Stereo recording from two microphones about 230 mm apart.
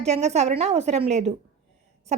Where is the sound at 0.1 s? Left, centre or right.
Right.